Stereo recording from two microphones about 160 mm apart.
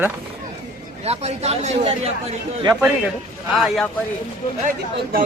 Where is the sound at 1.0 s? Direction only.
40° right (ahead or behind).